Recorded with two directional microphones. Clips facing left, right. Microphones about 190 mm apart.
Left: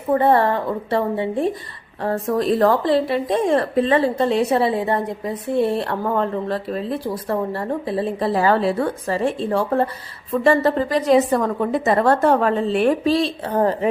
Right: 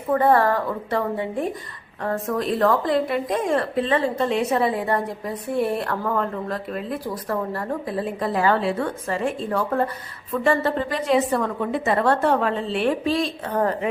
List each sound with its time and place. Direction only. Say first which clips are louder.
0.1 s a woman's voice: left 2 dB; 25° left (ahead or behind)